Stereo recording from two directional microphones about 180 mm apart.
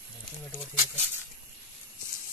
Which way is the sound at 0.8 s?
15° right (ahead or behind).